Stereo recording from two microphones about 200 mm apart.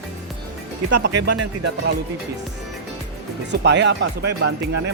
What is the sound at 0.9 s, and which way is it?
Speech, 55° right (ahead or behind).